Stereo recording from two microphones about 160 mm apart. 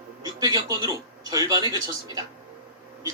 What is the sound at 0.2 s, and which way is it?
Speech, 25° right (ahead or behind).